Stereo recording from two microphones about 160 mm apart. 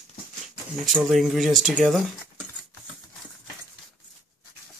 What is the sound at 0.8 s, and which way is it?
Speech, centre (ahead or behind).